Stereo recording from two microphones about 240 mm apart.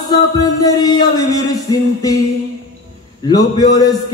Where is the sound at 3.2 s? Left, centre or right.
Centre.